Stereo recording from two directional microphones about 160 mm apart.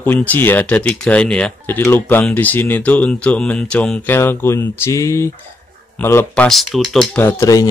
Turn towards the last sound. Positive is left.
turn(degrees=20)  # may be behind; listen again after turning